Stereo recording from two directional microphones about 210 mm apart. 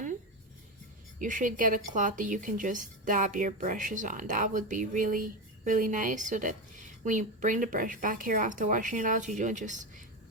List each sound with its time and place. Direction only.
1.2 s speech: 40° right (ahead or behind)